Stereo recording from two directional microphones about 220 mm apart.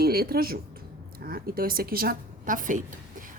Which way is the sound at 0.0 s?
45° right (ahead or behind).